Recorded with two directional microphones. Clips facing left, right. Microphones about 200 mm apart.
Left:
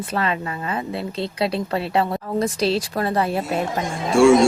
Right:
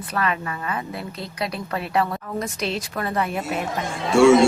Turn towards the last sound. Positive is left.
turn(degrees=0)  # may be behind; listen again after turning